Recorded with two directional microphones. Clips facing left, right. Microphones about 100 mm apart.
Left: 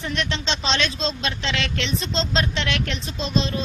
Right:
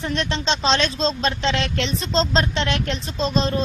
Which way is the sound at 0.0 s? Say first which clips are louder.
Right 3 dB; 40° right (ahead or behind).